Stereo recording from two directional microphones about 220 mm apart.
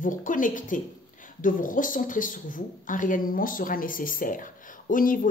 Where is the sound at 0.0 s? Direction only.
35° left (ahead or behind).